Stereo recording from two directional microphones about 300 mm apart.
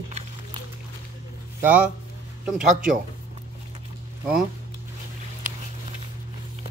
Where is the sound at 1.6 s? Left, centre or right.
Centre.